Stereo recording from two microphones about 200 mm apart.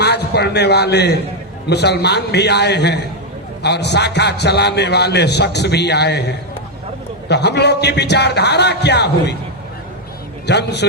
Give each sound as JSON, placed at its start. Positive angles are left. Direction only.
{"t": 0.0, "sound": "a man's voice", "side_deg": 55}
{"t": 10.4, "sound": "a man's voice", "side_deg": 60}